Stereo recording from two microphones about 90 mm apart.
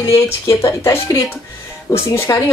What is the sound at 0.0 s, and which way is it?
Speech, 30° left (ahead or behind).